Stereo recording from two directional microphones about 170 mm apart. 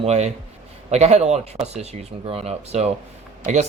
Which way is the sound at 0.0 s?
40° right (ahead or behind).